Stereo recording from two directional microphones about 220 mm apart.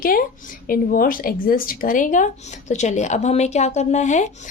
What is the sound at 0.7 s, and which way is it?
A woman's voice, 40° left (ahead or behind).